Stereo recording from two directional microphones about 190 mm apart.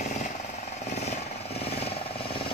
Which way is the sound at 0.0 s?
40° left (ahead or behind).